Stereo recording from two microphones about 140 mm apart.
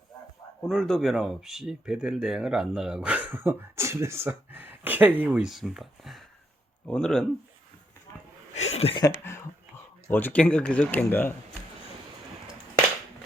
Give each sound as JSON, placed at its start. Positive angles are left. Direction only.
{"t": 0.7, "sound": "speech", "side_deg": 0}
{"t": 8.5, "sound": "speech", "side_deg": 50}
{"t": 10.1, "sound": "speech", "side_deg": 15}